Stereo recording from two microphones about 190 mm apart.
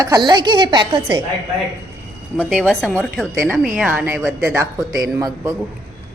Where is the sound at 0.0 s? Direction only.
20° right (ahead or behind).